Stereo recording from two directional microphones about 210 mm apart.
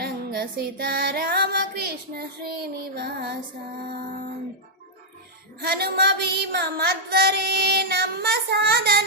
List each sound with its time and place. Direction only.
0.0 s female singing: 45° right (ahead or behind)
5.6 s female singing: 50° right (ahead or behind)